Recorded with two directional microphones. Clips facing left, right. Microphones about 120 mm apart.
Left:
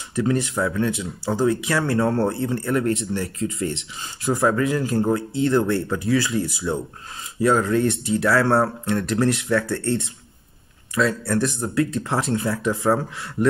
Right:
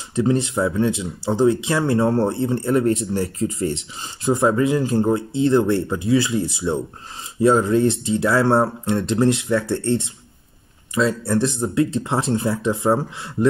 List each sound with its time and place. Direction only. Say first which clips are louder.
0.1 s speech: right 3 dB; 25° right (ahead or behind)